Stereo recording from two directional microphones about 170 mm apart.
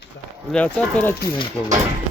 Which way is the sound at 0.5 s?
5° left (ahead or behind).